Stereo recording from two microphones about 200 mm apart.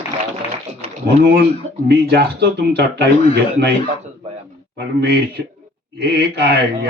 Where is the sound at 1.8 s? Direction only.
55° right (ahead or behind).